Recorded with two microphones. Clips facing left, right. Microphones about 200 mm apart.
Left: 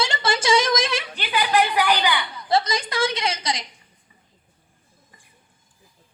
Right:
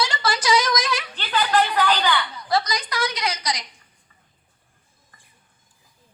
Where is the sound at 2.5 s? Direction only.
25° left (ahead or behind).